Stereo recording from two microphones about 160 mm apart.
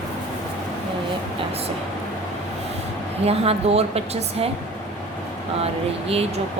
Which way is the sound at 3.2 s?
40° right (ahead or behind).